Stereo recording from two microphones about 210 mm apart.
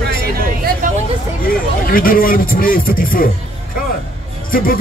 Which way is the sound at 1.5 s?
45° left (ahead or behind).